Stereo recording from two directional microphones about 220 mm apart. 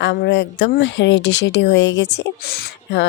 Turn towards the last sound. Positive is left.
turn(degrees=45)  # may be behind; listen again after turning